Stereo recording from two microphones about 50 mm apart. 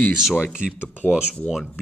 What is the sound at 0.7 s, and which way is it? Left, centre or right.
Speech, left.